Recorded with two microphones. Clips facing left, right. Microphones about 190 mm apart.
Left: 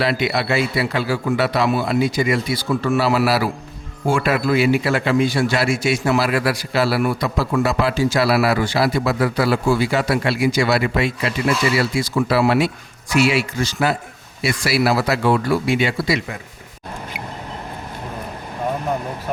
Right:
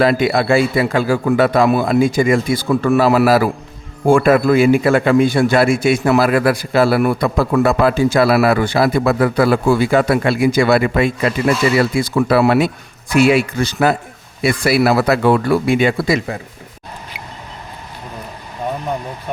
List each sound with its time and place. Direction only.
0.0 s a man's voice: 45° right (ahead or behind)